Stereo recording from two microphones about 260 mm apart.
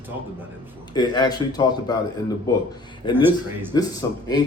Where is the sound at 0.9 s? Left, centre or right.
Centre.